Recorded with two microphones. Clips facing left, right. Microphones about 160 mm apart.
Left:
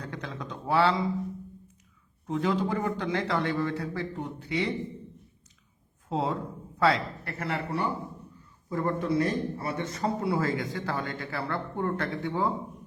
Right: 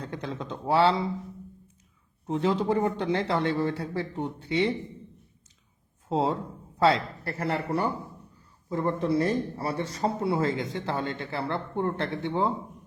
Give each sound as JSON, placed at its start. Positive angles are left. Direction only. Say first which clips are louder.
{"t": 0.0, "sound": "speech", "louder": "right 3 dB", "side_deg": -25}
{"t": 2.2, "sound": "speech", "louder": "right 2 dB", "side_deg": -30}
{"t": 6.1, "sound": "a man's voice", "louder": "right 3 dB", "side_deg": -30}
{"t": 8.7, "sound": "speech", "louder": "right 1 dB", "side_deg": -25}